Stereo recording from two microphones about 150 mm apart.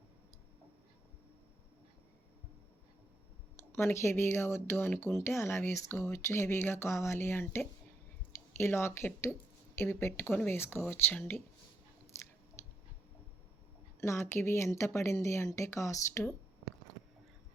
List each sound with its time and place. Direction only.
3.7 s speech: 15° left (ahead or behind)
14.0 s speech: 20° left (ahead or behind)